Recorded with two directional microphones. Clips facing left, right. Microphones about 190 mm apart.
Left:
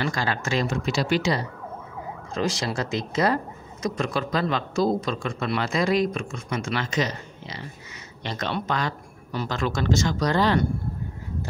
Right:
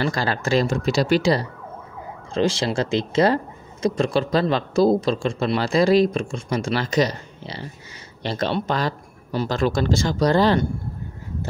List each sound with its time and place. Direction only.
0.0 s a man's voice: 35° right (ahead or behind)